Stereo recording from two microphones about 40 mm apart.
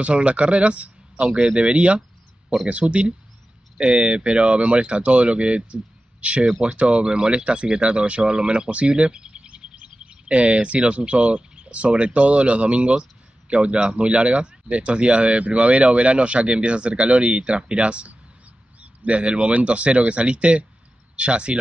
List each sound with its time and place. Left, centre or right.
0.0 s speech: right